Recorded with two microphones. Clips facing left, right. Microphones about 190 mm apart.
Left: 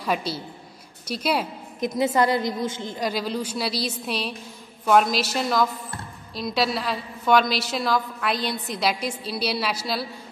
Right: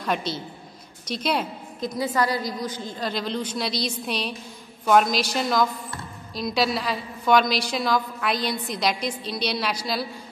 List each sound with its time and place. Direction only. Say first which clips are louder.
0.0 s a woman's voice: left 1 dB; 5° left (ahead or behind)
1.8 s a woman's voice: left 3 dB; 20° left (ahead or behind)
3.1 s a woman's voice: even; 10° left (ahead or behind)